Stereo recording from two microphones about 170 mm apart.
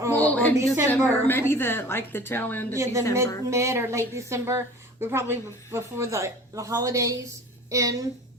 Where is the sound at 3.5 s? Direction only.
15° right (ahead or behind).